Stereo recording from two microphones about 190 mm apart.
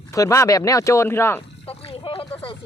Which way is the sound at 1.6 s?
30° left (ahead or behind).